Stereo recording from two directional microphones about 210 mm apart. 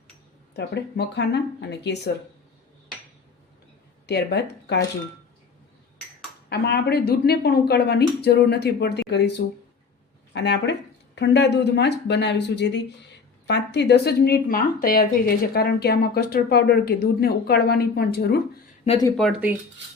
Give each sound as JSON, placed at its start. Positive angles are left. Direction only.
{"t": 0.5, "sound": "a woman's voice", "side_deg": 50}
{"t": 4.0, "sound": "speech", "side_deg": 50}
{"t": 6.5, "sound": "a woman's voice", "side_deg": 50}
{"t": 10.3, "sound": "a woman's voice", "side_deg": 55}
{"t": 19.0, "sound": "speech", "side_deg": 0}